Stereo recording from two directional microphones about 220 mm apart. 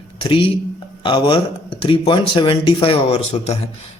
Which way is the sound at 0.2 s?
25° left (ahead or behind).